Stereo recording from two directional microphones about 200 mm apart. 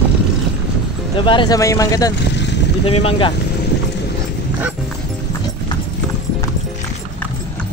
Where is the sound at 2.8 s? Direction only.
30° left (ahead or behind).